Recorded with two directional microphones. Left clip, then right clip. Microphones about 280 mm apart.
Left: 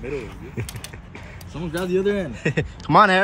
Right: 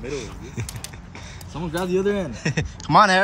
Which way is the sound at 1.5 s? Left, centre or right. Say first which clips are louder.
Even; centre.